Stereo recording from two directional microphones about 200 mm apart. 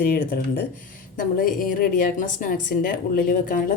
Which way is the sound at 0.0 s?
45° left (ahead or behind).